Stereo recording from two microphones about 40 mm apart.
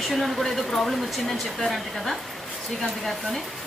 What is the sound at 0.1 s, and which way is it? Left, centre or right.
Speech, centre.